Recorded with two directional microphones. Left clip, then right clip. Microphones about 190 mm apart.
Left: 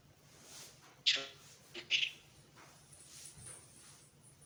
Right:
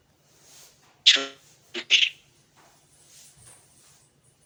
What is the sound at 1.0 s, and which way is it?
Beatboxing, 50° right (ahead or behind).